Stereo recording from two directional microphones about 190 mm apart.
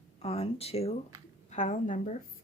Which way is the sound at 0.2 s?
35° left (ahead or behind).